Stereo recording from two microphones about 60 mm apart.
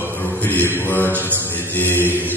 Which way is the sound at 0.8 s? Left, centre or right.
Left.